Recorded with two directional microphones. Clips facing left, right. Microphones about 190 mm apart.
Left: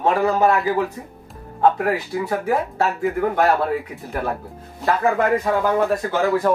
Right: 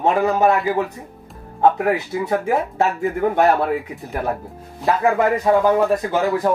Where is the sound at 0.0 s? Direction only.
20° right (ahead or behind).